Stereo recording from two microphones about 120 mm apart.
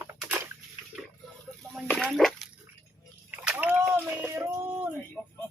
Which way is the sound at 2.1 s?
Centre (ahead or behind).